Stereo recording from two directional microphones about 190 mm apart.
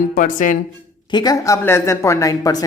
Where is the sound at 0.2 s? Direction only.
45° left (ahead or behind).